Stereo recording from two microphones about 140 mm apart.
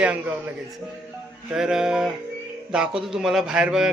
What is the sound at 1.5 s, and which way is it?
A man's voice, 5° right (ahead or behind).